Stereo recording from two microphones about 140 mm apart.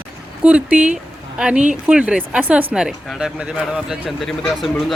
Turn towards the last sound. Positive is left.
turn(degrees=0)  # may be behind; listen again after turning